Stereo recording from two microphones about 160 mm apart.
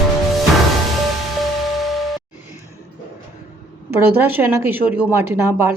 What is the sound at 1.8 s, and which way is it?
Music, centre (ahead or behind).